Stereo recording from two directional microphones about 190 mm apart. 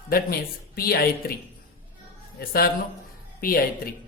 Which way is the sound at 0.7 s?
55° left (ahead or behind).